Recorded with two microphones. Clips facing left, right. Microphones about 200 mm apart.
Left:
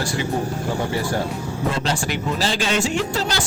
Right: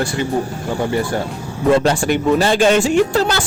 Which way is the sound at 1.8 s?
55° right (ahead or behind).